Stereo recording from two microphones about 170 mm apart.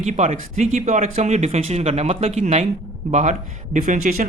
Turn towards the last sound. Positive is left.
turn(degrees=-45)  # may be behind; listen again after turning